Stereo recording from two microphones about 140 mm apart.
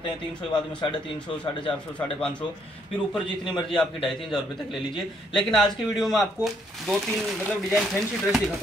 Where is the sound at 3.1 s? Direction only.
35° left (ahead or behind).